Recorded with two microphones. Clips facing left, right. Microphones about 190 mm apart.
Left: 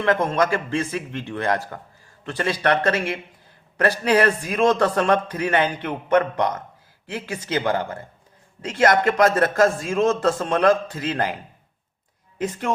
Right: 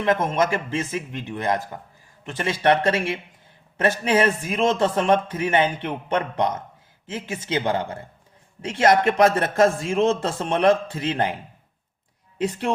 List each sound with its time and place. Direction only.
0.0 s a man's voice: 20° right (ahead or behind)